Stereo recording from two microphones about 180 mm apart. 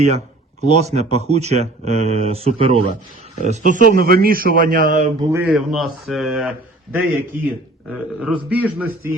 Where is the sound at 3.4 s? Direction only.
45° right (ahead or behind).